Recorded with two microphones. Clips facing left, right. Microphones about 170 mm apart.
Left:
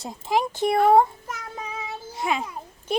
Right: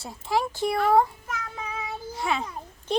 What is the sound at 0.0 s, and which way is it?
Speech, 15° left (ahead or behind).